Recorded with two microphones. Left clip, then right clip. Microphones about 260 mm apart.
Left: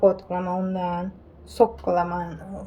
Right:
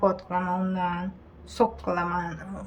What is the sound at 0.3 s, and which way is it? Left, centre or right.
Speech, right.